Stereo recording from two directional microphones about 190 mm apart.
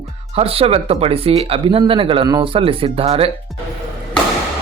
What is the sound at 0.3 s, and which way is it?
Speech, 30° right (ahead or behind).